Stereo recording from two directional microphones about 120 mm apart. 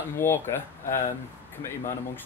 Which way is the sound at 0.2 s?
20° left (ahead or behind).